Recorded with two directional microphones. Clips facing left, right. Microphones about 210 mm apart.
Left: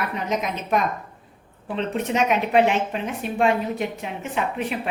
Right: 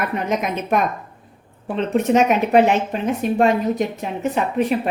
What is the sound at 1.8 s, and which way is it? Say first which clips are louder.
A woman's voice: right 7 dB; 45° right (ahead or behind).